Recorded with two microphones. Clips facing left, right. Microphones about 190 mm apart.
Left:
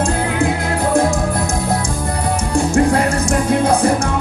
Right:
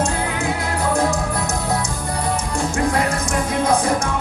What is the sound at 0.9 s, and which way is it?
Music, 30° left (ahead or behind).